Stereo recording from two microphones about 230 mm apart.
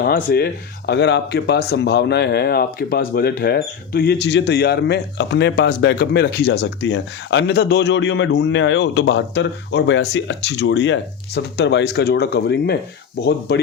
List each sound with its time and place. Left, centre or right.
0.0 s speech: left